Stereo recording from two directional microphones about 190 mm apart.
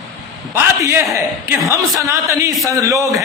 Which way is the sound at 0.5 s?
10° right (ahead or behind).